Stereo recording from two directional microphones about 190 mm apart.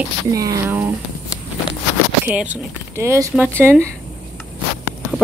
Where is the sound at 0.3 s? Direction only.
15° right (ahead or behind).